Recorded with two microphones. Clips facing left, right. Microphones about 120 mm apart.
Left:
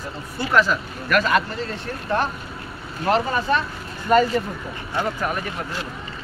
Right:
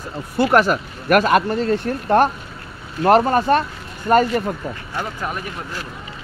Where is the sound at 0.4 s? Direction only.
55° right (ahead or behind).